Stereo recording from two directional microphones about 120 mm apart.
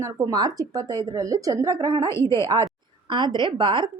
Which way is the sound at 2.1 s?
25° left (ahead or behind).